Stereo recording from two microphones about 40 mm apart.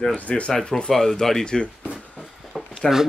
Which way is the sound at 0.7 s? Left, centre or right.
Centre.